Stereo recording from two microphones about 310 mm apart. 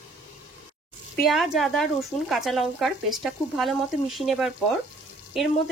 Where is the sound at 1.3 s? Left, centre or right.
Centre.